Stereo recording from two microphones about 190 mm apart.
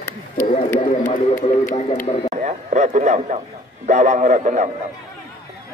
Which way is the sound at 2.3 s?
40° right (ahead or behind).